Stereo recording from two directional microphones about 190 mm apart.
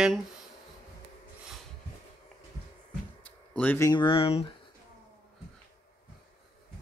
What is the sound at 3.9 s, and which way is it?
Speech, 25° left (ahead or behind).